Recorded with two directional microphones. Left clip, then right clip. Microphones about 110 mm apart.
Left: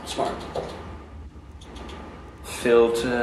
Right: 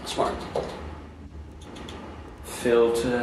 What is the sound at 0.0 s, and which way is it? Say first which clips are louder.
Speech: right 1 dB; 15° right (ahead or behind).